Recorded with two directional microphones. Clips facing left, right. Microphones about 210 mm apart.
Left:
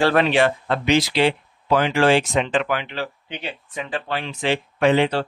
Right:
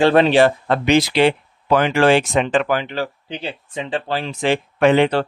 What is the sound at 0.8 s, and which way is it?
Speech, 55° right (ahead or behind).